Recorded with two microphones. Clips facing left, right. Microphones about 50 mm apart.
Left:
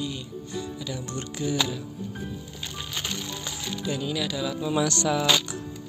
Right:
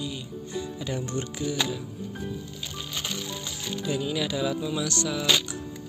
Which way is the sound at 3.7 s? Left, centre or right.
Centre.